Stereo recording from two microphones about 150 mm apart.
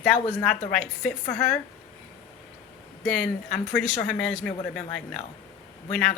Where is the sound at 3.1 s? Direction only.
5° left (ahead or behind).